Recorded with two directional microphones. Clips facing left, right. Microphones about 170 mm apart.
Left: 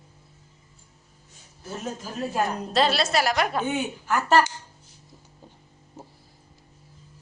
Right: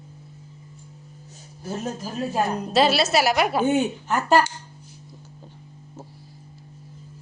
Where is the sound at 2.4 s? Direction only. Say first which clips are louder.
Right 4 dB; 5° right (ahead or behind).